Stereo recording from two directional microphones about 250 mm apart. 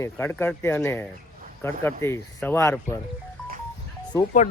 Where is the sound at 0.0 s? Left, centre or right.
Centre.